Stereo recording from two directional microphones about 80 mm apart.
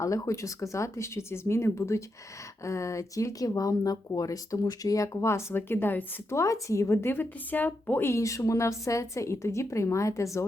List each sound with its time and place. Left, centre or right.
0.0 s speech: left
6.3 s speech: left
8.1 s speech: left